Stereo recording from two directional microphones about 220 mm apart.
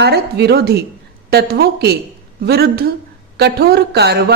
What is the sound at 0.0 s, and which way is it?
A woman's voice, 50° right (ahead or behind).